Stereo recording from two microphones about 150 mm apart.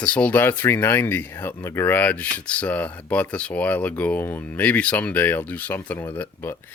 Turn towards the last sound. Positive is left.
turn(degrees=15)  # may be behind; listen again after turning